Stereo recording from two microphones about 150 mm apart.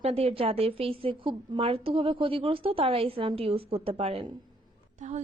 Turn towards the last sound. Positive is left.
turn(degrees=-50)  # may be behind; listen again after turning